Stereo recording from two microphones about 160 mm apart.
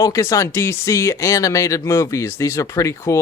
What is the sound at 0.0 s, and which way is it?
Speech, 20° left (ahead or behind).